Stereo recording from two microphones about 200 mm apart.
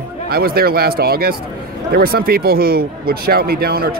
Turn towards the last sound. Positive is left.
turn(degrees=-50)  # may be behind; listen again after turning